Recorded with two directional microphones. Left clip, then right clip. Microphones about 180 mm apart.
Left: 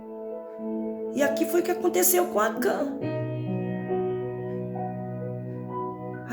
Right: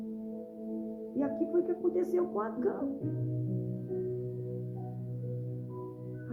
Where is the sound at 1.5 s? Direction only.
25° left (ahead or behind).